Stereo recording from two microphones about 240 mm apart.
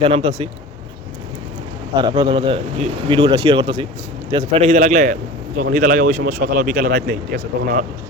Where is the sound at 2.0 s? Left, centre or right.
Right.